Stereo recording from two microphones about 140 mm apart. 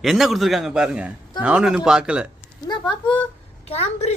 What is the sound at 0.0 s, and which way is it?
A man's voice, centre (ahead or behind).